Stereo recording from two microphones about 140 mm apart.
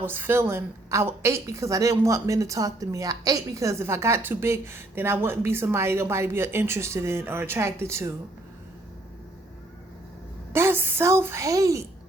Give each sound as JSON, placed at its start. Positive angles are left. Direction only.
{"t": 0.0, "sound": "a woman's voice", "side_deg": -15}
{"t": 10.5, "sound": "a woman's voice", "side_deg": -15}